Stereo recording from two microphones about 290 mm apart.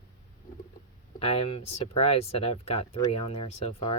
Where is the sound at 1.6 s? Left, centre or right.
Left.